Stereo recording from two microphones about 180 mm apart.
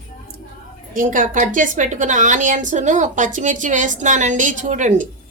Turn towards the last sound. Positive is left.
turn(degrees=-45)  # may be behind; listen again after turning